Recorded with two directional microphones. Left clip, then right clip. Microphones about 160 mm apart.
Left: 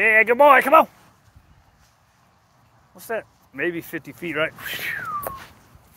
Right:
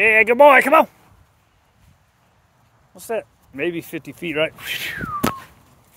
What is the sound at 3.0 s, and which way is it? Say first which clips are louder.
Speech: right 3 dB; 90° right.